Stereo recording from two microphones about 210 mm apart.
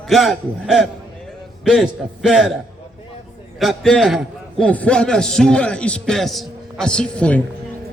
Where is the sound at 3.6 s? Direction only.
Centre (ahead or behind).